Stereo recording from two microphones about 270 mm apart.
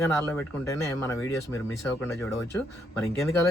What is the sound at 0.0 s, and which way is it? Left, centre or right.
Speech, centre.